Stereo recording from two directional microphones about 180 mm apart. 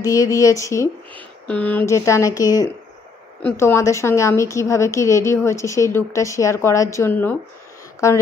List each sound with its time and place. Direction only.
0.0 s a woman's voice: 20° left (ahead or behind)